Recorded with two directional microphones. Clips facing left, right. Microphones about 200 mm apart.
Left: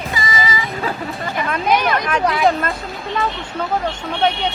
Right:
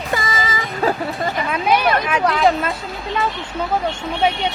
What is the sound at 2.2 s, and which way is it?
Speech, 10° left (ahead or behind).